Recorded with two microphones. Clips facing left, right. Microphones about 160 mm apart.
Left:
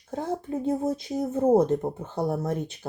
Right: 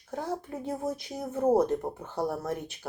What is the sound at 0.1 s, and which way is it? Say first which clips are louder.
Speech: left 4 dB; 25° left (ahead or behind).